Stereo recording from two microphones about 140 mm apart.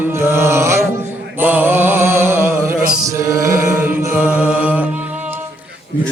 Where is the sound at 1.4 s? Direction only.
15° right (ahead or behind).